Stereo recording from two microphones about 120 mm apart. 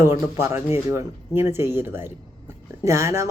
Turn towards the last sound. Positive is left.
turn(degrees=-25)  # may be behind; listen again after turning